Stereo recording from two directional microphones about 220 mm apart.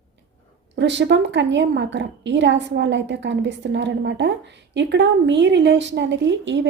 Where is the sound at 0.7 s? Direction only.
55° right (ahead or behind).